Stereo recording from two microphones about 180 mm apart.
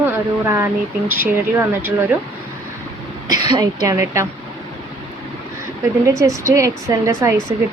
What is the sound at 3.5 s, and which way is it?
Speech, 20° right (ahead or behind).